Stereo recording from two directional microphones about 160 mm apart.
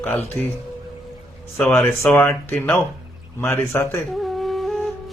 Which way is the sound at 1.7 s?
15° left (ahead or behind).